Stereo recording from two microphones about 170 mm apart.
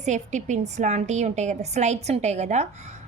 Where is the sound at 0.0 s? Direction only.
45° right (ahead or behind).